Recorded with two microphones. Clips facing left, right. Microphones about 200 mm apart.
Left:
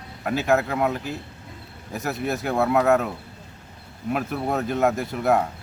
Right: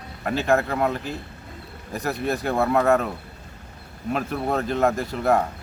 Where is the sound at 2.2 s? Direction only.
5° left (ahead or behind).